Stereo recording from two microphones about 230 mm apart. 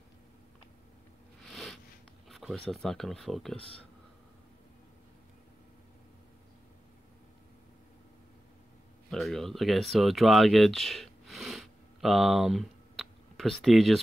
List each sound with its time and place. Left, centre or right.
1.4 s a sound: centre
2.2 s speech: centre
3.5 s speech: left
9.1 s speech: centre